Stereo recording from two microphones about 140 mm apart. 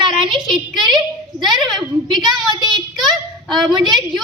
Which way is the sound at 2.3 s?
Centre (ahead or behind).